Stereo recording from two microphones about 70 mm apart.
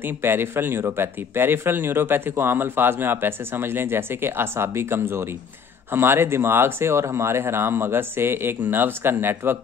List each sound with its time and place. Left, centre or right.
0.0 s speech: right